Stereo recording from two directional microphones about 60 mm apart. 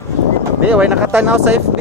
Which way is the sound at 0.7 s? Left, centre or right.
Right.